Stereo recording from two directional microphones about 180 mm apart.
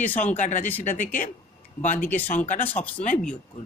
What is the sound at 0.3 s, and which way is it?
Speech, 45° left (ahead or behind).